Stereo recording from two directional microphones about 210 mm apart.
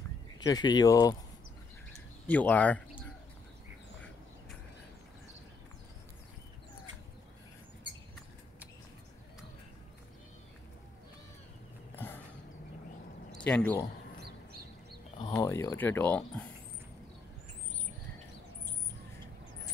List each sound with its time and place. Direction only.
0.4 s speech: 20° left (ahead or behind)
2.2 s speech: 5° left (ahead or behind)
7.8 s rodents: 25° right (ahead or behind)
13.3 s speech: 5° left (ahead or behind)
15.1 s speech: 20° left (ahead or behind)